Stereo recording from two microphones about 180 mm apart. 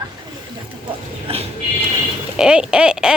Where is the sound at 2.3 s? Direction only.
5° right (ahead or behind).